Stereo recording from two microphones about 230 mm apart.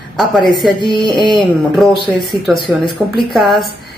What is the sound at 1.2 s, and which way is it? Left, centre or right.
Speech, centre.